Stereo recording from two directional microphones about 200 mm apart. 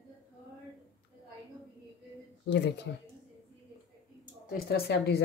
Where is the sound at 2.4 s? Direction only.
60° left (ahead or behind).